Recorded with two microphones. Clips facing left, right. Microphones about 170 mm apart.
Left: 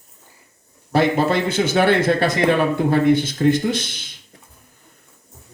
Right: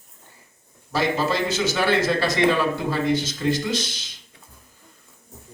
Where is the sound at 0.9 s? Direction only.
55° left (ahead or behind).